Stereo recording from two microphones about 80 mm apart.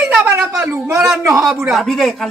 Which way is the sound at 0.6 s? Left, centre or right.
Right.